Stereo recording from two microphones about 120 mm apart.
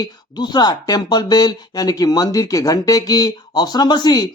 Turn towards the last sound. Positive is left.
turn(degrees=35)  # may be behind; listen again after turning